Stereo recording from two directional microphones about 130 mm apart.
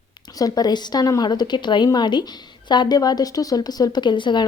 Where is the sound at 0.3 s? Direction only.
30° left (ahead or behind).